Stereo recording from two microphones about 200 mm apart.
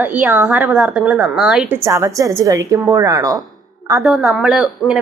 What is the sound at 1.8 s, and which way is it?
A woman's voice, 15° right (ahead or behind).